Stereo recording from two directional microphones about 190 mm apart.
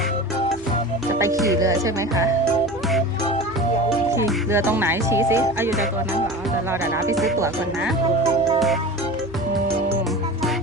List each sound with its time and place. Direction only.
1.5 s speech: 15° right (ahead or behind)
4.5 s speech: 10° right (ahead or behind)
6.9 s speech: 15° right (ahead or behind)
8.5 s music: centre (ahead or behind)